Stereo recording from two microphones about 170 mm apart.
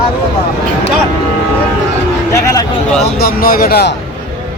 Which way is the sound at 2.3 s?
20° left (ahead or behind).